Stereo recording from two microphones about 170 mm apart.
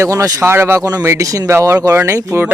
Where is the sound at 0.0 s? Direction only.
20° right (ahead or behind).